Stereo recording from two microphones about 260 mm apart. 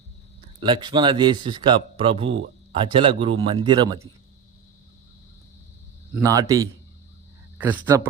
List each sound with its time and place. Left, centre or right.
0.6 s a man's voice: centre
6.2 s a man's voice: centre